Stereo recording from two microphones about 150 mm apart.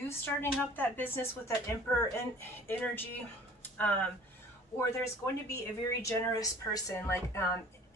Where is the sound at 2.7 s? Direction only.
15° left (ahead or behind).